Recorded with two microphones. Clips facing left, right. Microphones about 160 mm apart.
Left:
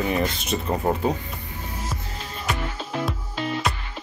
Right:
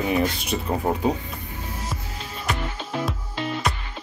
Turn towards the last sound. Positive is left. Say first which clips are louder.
# even
turn(degrees=0)  # may be behind; listen again after turning